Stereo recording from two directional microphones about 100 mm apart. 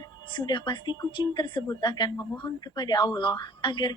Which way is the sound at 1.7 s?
45° left (ahead or behind).